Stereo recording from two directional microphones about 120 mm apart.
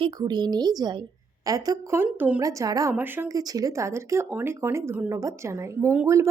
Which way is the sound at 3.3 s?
30° right (ahead or behind).